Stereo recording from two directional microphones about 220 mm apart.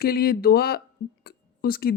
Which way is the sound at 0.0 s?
45° left (ahead or behind).